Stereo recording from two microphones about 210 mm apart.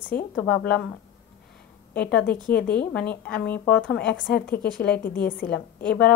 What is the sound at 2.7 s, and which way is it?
A woman's voice, 5° left (ahead or behind).